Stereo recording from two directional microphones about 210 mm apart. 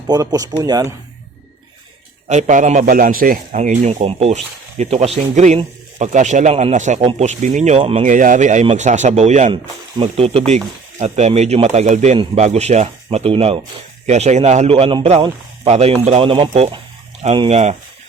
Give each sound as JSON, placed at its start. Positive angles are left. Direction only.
{"t": 0.1, "sound": "speech", "side_deg": -15}
{"t": 2.2, "sound": "a man's voice", "side_deg": -35}